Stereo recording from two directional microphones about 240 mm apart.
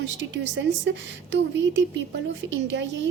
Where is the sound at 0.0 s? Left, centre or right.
Right.